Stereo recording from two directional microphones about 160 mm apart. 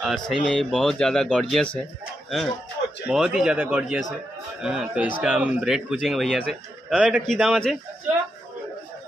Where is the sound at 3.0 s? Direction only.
5° right (ahead or behind).